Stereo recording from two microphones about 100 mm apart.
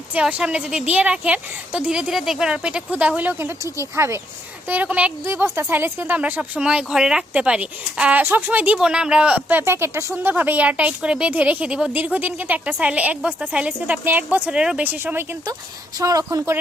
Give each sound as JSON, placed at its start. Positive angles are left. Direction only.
{"t": 0.1, "sound": "speech", "side_deg": -15}
{"t": 4.7, "sound": "speech", "side_deg": -15}
{"t": 5.2, "sound": "speech", "side_deg": -25}
{"t": 16.0, "sound": "speech", "side_deg": -35}